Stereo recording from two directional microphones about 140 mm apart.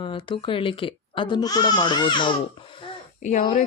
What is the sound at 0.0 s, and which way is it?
Speech, 35° left (ahead or behind).